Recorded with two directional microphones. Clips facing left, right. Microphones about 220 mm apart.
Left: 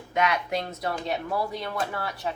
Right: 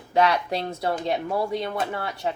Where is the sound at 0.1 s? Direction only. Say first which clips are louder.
Right 4 dB; 35° right (ahead or behind).